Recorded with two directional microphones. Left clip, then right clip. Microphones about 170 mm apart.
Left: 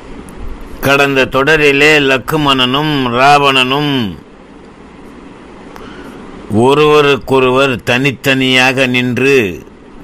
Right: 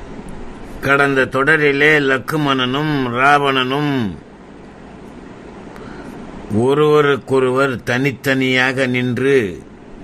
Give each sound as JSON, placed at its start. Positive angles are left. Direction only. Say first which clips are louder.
{"t": 0.7, "sound": "speech", "louder": "left 4 dB", "side_deg": 15}
{"t": 3.2, "sound": "speech", "louder": "left 6 dB", "side_deg": 15}
{"t": 6.6, "sound": "speech", "louder": "left 5 dB", "side_deg": 15}